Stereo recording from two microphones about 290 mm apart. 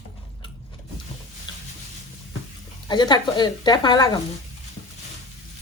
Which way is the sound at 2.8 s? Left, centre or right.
Centre.